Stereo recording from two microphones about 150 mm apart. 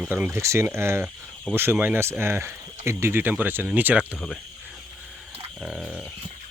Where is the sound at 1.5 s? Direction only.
Centre (ahead or behind).